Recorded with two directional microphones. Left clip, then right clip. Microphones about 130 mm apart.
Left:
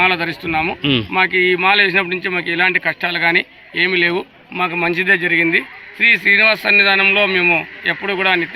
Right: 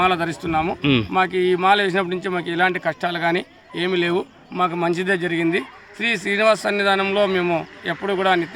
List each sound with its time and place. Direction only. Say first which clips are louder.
0.0 s speech: left 4 dB; 30° right (ahead or behind)
0.8 s speech: left 2 dB; 10° right (ahead or behind)
1.1 s speech: left 7 dB; 30° right (ahead or behind)